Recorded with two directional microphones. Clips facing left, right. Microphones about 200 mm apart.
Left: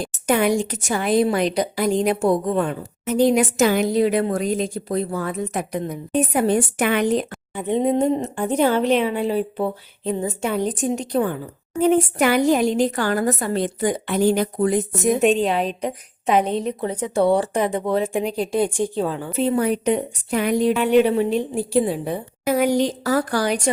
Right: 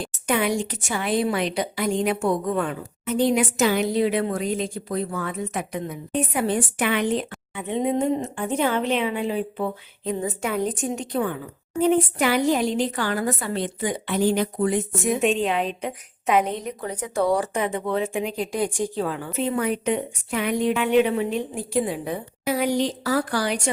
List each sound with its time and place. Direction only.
0.0 s a woman's voice: 45° left (ahead or behind)
11.9 s a woman's voice: 50° left (ahead or behind); by 22.2 s 30° left (ahead or behind)
22.4 s a woman's voice: 45° left (ahead or behind)